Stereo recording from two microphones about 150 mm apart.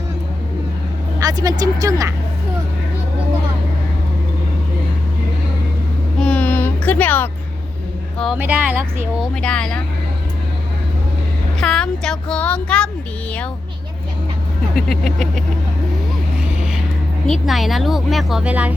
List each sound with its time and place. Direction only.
1.2 s speech: 25° right (ahead or behind)
6.1 s a sound: 5° left (ahead or behind)
8.4 s speech: 10° right (ahead or behind)
9.2 s speech: 5° left (ahead or behind)
11.6 s speech: 5° left (ahead or behind)
14.8 s speech: centre (ahead or behind)
17.2 s speech: centre (ahead or behind)